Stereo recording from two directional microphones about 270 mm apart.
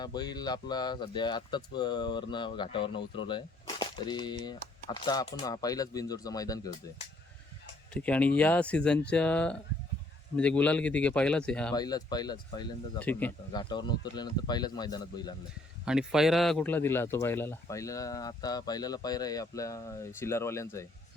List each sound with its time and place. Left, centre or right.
0.0 s speech: centre
7.9 s speech: centre
11.7 s speech: centre
15.9 s speech: centre